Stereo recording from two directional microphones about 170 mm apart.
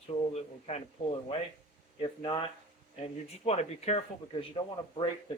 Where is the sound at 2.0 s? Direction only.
25° left (ahead or behind).